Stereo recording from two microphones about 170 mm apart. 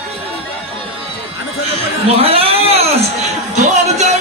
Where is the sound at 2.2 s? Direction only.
35° right (ahead or behind).